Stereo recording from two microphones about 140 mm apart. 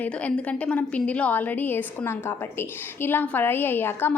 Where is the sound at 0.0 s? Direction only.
10° left (ahead or behind).